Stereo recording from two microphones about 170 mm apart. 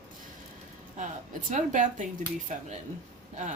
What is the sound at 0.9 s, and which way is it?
Speech, 50° right (ahead or behind).